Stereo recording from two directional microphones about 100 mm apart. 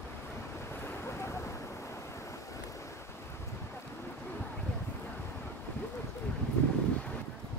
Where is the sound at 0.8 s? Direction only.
25° left (ahead or behind).